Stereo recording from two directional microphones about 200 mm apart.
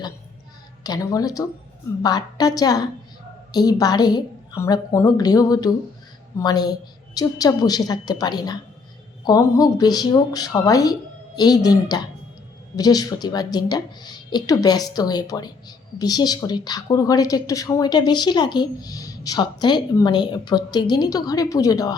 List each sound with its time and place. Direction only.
0.9 s a woman's voice: 15° left (ahead or behind)